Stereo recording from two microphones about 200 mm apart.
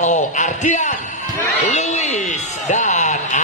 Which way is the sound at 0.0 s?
35° left (ahead or behind).